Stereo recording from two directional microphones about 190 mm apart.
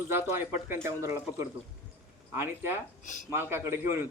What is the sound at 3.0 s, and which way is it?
Speech, 40° left (ahead or behind).